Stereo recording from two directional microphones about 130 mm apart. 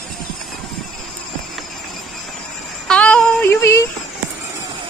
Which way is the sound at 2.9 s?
5° left (ahead or behind).